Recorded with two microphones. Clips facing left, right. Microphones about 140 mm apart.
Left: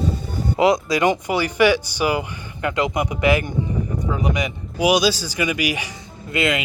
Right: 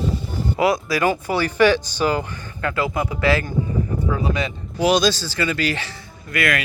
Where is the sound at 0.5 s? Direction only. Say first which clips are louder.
Left 2 dB; 20° left (ahead or behind).